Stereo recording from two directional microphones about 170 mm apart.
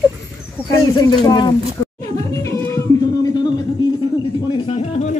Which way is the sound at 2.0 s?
20° left (ahead or behind).